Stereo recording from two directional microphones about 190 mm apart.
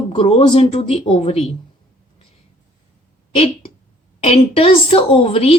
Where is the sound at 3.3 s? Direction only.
30° left (ahead or behind).